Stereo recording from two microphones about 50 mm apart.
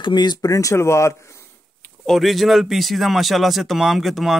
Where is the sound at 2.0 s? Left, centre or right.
Centre.